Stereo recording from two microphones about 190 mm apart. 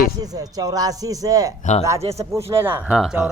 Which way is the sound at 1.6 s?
40° left (ahead or behind).